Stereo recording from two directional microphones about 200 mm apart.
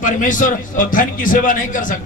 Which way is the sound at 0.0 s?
40° left (ahead or behind).